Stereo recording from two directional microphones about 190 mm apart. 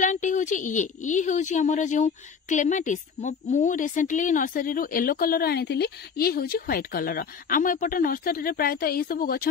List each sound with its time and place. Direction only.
0.0 s speech: 40° left (ahead or behind)